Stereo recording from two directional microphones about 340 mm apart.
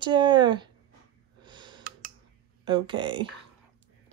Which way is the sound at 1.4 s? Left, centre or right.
Centre.